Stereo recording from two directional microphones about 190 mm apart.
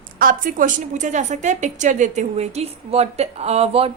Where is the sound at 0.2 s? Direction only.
45° right (ahead or behind).